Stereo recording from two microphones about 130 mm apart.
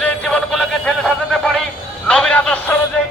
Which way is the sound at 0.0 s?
5° left (ahead or behind).